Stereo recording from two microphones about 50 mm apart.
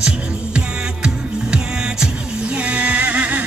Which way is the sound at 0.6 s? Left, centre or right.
Centre.